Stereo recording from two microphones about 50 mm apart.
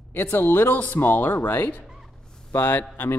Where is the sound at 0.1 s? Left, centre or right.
Left.